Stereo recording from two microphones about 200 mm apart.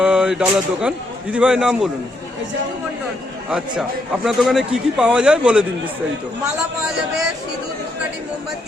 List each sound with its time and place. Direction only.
0.0 s speech: 5° right (ahead or behind)
3.5 s a man's voice: 5° right (ahead or behind)